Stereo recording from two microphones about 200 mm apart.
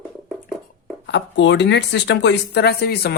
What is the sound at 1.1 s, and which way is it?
Speech, 60° left (ahead or behind).